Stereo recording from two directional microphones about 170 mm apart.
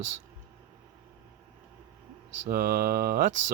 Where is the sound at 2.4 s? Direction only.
60° right (ahead or behind).